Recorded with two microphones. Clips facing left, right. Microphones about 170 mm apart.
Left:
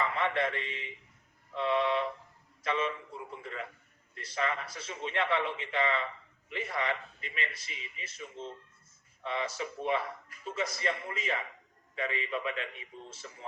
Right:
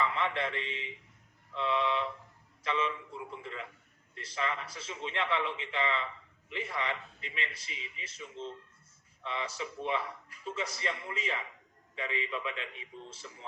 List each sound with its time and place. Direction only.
0.0 s a man's voice: 45° left (ahead or behind)